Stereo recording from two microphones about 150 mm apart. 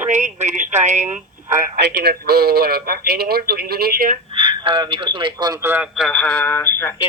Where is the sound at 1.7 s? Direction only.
90° right.